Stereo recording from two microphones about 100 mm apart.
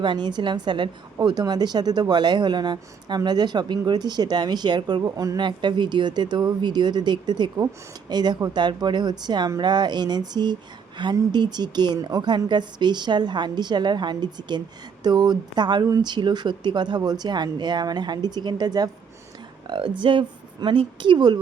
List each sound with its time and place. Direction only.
0.0 s a woman's voice: 50° right (ahead or behind)
5.4 s a woman's voice: 50° right (ahead or behind)